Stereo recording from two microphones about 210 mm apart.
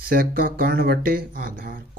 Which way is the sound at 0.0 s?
45° right (ahead or behind).